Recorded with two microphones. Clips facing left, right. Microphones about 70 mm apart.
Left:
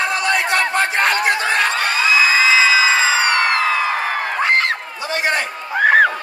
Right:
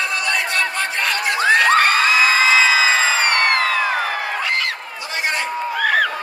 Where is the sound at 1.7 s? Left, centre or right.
Right.